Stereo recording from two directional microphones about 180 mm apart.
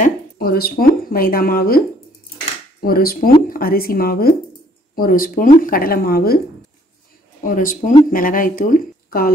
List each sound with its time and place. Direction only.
0.0 s speech: 55° left (ahead or behind)
2.8 s speech: 55° left (ahead or behind)
7.4 s speech: 50° left (ahead or behind)